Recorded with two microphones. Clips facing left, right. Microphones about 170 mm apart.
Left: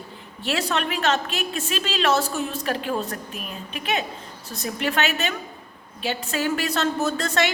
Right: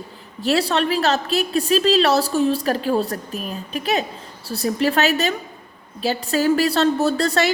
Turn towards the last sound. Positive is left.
turn(degrees=-35)  # may be behind; listen again after turning